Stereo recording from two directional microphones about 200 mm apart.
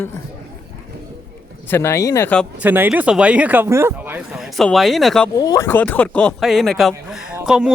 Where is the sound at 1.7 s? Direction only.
10° left (ahead or behind).